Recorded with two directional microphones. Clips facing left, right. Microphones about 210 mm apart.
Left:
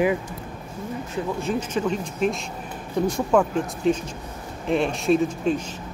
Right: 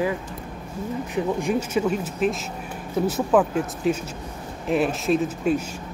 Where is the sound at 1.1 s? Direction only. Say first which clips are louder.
Right 3 dB; 10° right (ahead or behind).